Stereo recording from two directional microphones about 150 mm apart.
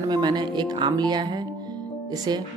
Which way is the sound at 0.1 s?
30° right (ahead or behind).